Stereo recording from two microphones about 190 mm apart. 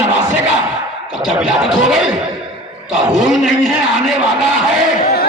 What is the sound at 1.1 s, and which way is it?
A man's voice, centre (ahead or behind).